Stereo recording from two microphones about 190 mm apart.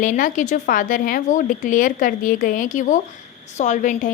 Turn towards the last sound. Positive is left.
turn(degrees=40)  # may be behind; listen again after turning